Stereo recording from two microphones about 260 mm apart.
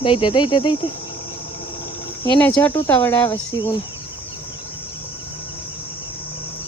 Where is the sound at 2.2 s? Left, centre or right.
Centre.